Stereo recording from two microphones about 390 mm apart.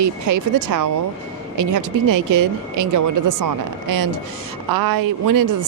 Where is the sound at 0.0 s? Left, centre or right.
Right.